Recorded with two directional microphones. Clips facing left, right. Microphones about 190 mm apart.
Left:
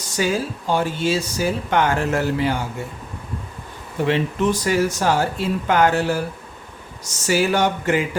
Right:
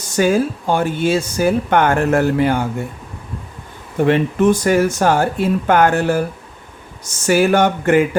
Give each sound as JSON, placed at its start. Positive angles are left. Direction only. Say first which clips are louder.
{"t": 0.2, "sound": "speech", "louder": "right 7 dB", "side_deg": -50}
{"t": 4.0, "sound": "speech", "louder": "right 6 dB", "side_deg": -50}
{"t": 7.3, "sound": "a sound", "louder": "right 5 dB", "side_deg": -55}